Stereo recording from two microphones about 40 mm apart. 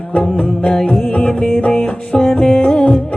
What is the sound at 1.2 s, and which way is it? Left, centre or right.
Music, centre.